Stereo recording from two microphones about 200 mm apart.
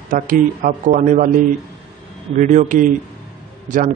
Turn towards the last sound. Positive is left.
turn(degrees=-40)  # may be behind; listen again after turning